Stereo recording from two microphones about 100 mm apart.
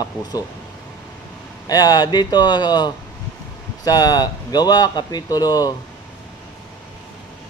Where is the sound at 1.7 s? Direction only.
40° left (ahead or behind).